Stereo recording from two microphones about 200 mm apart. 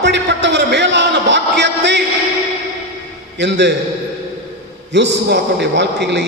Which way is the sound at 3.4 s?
60° right (ahead or behind).